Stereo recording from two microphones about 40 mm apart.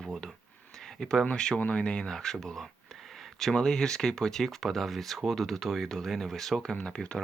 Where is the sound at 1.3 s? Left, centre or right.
Left.